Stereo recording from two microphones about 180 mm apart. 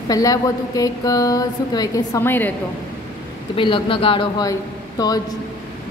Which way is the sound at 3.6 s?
30° left (ahead or behind).